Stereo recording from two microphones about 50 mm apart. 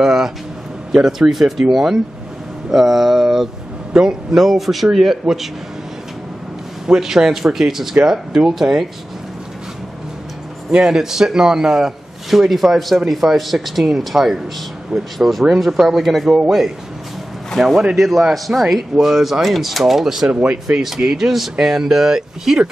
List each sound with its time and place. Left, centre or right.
0.0 s a sound: centre
1.0 s a man's voice: centre
7.0 s a man's voice: centre
10.7 s a man's voice: centre
17.6 s a man's voice: centre